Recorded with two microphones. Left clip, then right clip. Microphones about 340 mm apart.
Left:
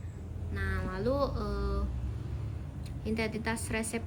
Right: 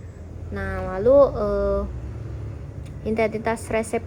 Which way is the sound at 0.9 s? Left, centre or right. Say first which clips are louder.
Right 17 dB; right.